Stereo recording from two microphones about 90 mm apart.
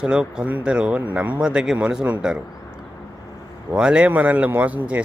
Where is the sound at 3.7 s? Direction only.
10° right (ahead or behind).